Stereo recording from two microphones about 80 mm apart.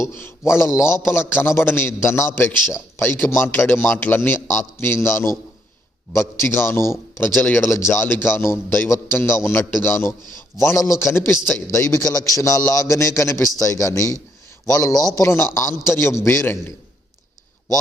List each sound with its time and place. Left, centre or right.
0.0 s a man's voice: left
7.7 s a man's voice: left